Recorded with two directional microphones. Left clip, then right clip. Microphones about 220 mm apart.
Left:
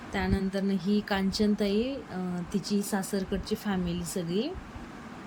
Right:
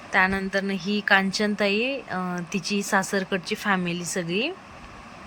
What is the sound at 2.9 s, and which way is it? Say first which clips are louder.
Speech: right 9 dB; 30° right (ahead or behind).